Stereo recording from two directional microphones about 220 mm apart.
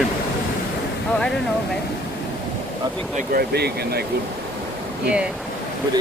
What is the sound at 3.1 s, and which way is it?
Speech, 45° right (ahead or behind).